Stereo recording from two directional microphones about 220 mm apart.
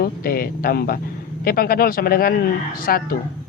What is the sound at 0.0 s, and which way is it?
Speech, 45° left (ahead or behind).